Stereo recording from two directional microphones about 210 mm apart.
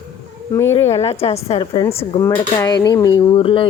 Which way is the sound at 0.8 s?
30° left (ahead or behind).